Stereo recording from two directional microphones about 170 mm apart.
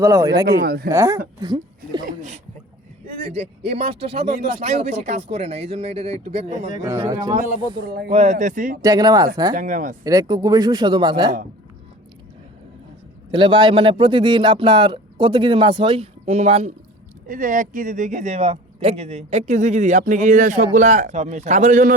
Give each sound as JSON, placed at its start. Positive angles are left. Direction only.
{"t": 0.0, "sound": "speech", "side_deg": -20}
{"t": 0.4, "sound": "speech", "side_deg": -65}
{"t": 0.9, "sound": "speech", "side_deg": -20}
{"t": 2.0, "sound": "speech", "side_deg": -45}
{"t": 3.3, "sound": "speech", "side_deg": -35}
{"t": 7.1, "sound": "speech", "side_deg": -20}
{"t": 7.9, "sound": "speech", "side_deg": -65}
{"t": 8.1, "sound": "speech", "side_deg": -40}
{"t": 8.8, "sound": "speech", "side_deg": -20}
{"t": 9.6, "sound": "speech", "side_deg": -50}
{"t": 10.0, "sound": "speech", "side_deg": -20}
{"t": 13.3, "sound": "speech", "side_deg": -25}
{"t": 17.2, "sound": "speech", "side_deg": -50}